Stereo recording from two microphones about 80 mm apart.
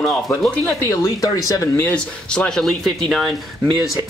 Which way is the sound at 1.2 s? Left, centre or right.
Left.